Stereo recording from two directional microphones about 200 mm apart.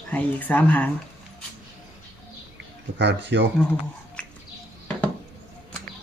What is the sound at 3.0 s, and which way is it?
Speech, 60° right (ahead or behind).